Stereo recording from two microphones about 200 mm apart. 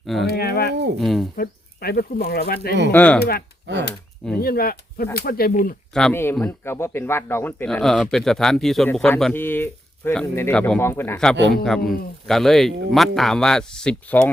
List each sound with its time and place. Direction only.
0.0 s speech: centre (ahead or behind)
0.3 s speech: 50° left (ahead or behind)
0.9 s speech: centre (ahead or behind)
1.4 s speech: 50° left (ahead or behind)
2.9 s speech: 5° left (ahead or behind)
4.4 s speech: 50° left (ahead or behind)
5.9 s speech: 5° left (ahead or behind)